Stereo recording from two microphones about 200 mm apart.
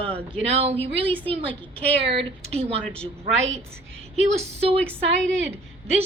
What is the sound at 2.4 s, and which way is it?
Speech, 30° right (ahead or behind).